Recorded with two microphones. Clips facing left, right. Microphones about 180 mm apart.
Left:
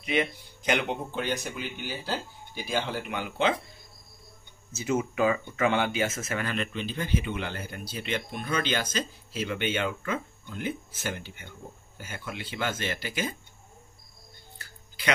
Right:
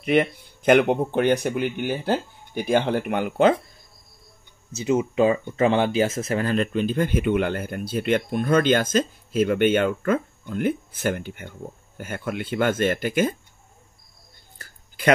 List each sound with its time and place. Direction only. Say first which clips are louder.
0.0 s speech: right 8 dB; 55° right (ahead or behind)
4.8 s speech: right 6 dB; 25° right (ahead or behind); by 13.4 s 55° right (ahead or behind)
14.6 s a sound: right 13 dB; 50° right (ahead or behind)